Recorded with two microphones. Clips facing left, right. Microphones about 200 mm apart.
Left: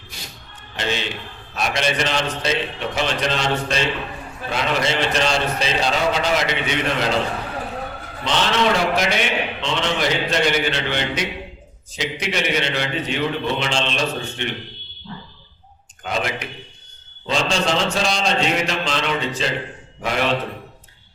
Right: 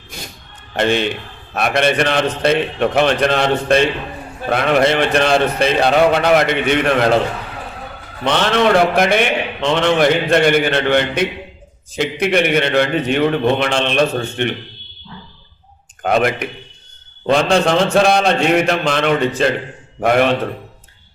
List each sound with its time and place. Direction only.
0.8 s a man's voice: 55° right (ahead or behind)
8.2 s a man's voice: 60° right (ahead or behind)
16.0 s a man's voice: 55° right (ahead or behind)